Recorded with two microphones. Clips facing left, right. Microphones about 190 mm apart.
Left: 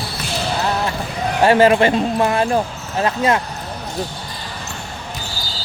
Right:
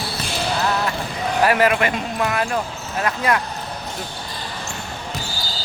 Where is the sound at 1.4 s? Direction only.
30° left (ahead or behind).